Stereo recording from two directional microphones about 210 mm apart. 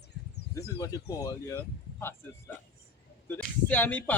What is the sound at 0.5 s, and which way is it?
Speech, 15° left (ahead or behind).